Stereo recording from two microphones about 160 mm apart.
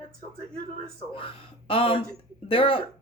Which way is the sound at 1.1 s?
35° left (ahead or behind).